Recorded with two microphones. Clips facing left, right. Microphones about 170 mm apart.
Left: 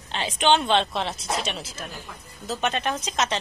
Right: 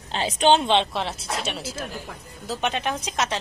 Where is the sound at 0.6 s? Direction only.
20° right (ahead or behind).